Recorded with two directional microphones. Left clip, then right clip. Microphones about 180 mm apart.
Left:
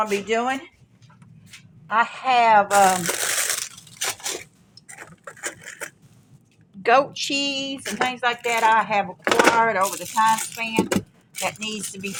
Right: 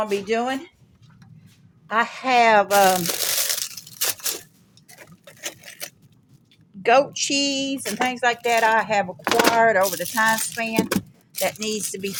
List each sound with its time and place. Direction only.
0.3 s a woman's voice: 35° right (ahead or behind)
1.9 s speech: 65° right (ahead or behind)
2.7 s crumpling: 60° right (ahead or behind)
6.8 s a woman's voice: 30° right (ahead or behind)
7.4 s speech: 55° right (ahead or behind)
9.2 s speech: 85° right
9.6 s speech: 45° right (ahead or behind)